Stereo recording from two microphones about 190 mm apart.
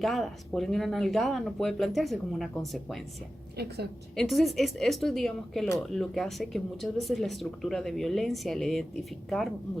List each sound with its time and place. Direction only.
0.0 s speech: centre (ahead or behind)
4.1 s speech: centre (ahead or behind)